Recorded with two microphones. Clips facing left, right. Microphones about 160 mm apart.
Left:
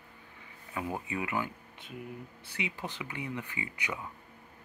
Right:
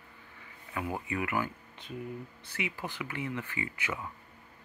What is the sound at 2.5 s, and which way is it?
Speech, 20° left (ahead or behind).